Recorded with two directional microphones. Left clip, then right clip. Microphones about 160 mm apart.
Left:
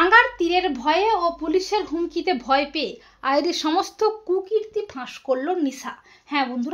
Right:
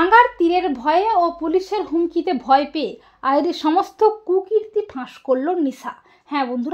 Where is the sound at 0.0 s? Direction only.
45° right (ahead or behind).